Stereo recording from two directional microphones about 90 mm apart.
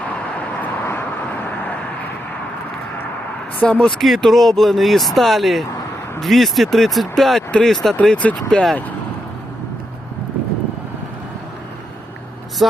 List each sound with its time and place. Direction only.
0.3 s vehicle: 20° left (ahead or behind)
3.6 s speech: 15° left (ahead or behind)
4.0 s speech: centre (ahead or behind)